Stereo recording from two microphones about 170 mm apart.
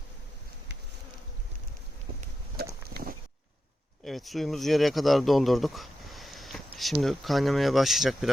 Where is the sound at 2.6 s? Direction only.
65° right (ahead or behind).